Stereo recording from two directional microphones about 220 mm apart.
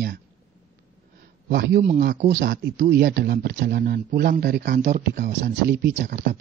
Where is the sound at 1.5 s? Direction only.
50° right (ahead or behind).